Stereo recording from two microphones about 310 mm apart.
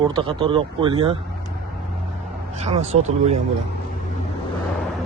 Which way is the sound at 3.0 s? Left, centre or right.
Right.